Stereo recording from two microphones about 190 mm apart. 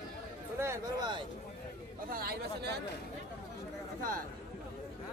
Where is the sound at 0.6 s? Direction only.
20° right (ahead or behind).